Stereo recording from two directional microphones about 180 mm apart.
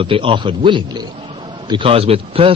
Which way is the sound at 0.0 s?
30° right (ahead or behind).